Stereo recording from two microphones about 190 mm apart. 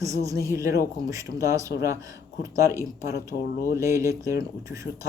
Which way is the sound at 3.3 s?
45° left (ahead or behind).